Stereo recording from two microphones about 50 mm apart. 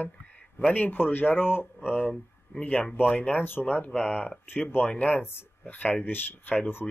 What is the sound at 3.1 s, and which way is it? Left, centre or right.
Speech, left.